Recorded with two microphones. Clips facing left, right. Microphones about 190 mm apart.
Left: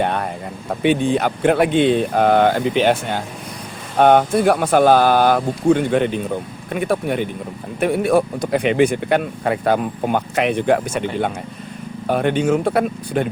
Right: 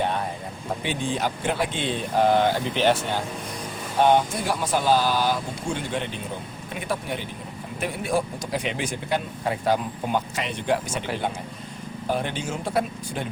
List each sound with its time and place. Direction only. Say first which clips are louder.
0.0 s vehicle: left 5 dB; 65° left (ahead or behind)
0.8 s speech: left 11 dB; 60° left (ahead or behind)